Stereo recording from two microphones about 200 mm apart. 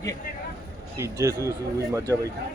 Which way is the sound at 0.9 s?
15° right (ahead or behind).